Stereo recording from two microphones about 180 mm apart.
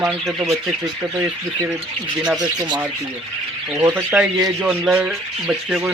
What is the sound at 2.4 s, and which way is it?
Speech, 20° right (ahead or behind).